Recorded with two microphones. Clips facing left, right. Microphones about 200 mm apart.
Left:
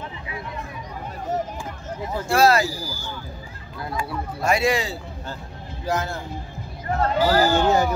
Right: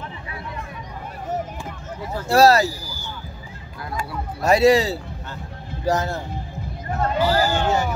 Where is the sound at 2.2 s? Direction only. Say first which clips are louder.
Right 3 dB; 40° right (ahead or behind).